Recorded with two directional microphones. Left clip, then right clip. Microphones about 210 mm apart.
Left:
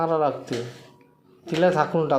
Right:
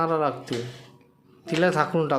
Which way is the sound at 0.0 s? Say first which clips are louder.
Left 2 dB; 15° right (ahead or behind).